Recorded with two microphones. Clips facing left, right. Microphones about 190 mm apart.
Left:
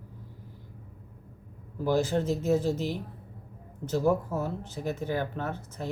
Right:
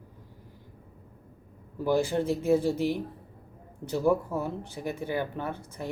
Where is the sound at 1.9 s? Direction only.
10° right (ahead or behind).